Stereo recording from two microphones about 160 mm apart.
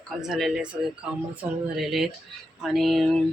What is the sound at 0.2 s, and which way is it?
Speech, centre (ahead or behind).